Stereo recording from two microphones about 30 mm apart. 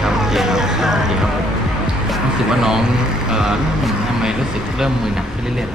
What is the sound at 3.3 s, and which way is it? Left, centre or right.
Speech, centre.